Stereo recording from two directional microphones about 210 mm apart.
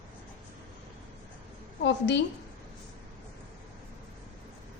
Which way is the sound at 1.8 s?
55° left (ahead or behind).